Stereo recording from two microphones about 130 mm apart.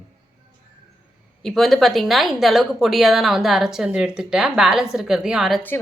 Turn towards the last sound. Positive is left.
turn(degrees=-5)  # may be behind; listen again after turning